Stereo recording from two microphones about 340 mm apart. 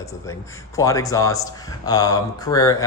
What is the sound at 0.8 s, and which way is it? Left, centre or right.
Speech, centre.